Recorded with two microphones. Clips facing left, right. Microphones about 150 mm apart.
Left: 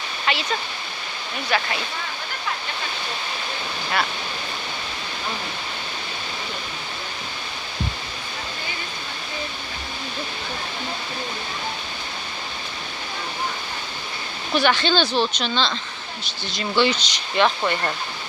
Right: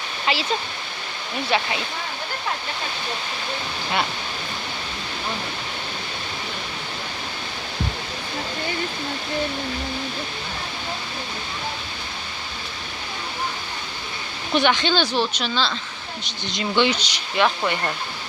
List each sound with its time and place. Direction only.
0.3 s speech: 30° right (ahead or behind)
1.5 s a woman's voice: 25° right (ahead or behind)
14.5 s speech: 20° right (ahead or behind)
16.2 s a woman's voice: 20° right (ahead or behind); by 17.9 s centre (ahead or behind)